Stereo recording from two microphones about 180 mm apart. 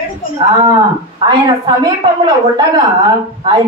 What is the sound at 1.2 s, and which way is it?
A woman's voice, 25° right (ahead or behind).